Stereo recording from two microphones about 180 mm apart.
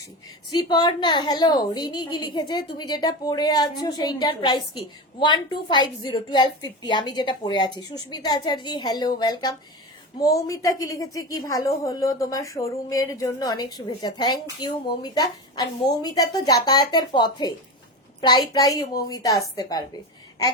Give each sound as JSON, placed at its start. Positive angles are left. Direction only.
{"t": 0.5, "sound": "a woman's voice", "side_deg": 25}